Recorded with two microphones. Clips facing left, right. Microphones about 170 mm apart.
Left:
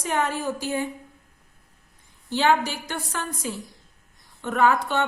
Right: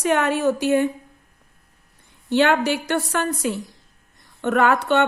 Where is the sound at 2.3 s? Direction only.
65° right (ahead or behind).